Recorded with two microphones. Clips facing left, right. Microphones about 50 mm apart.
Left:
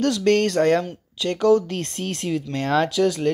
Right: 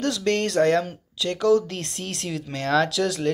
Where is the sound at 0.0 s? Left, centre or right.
Left.